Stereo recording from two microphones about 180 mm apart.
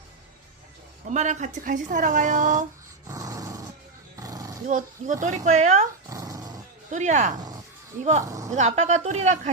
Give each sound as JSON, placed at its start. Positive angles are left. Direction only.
{"t": 1.0, "sound": "speech", "side_deg": -40}
{"t": 3.1, "sound": "dog", "side_deg": -20}
{"t": 4.2, "sound": "roar", "side_deg": -20}
{"t": 4.6, "sound": "a woman's voice", "side_deg": -45}
{"t": 6.1, "sound": "dog", "side_deg": -20}
{"t": 6.9, "sound": "speech", "side_deg": -45}
{"t": 8.2, "sound": "speech", "side_deg": -15}
{"t": 8.4, "sound": "a woman's voice", "side_deg": -40}